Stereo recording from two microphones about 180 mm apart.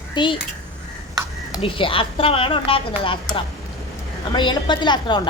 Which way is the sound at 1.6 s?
30° left (ahead or behind).